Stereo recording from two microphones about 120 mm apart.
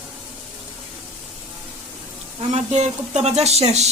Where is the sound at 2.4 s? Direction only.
65° right (ahead or behind).